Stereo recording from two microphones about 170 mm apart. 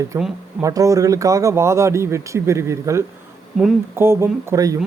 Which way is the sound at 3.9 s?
15° right (ahead or behind).